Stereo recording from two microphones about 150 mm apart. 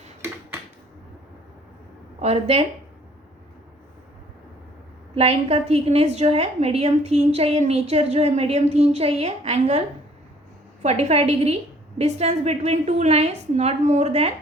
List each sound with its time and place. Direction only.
2.1 s speech: 45° right (ahead or behind)
5.1 s a woman's voice: 45° right (ahead or behind)
10.8 s a woman's voice: 45° right (ahead or behind)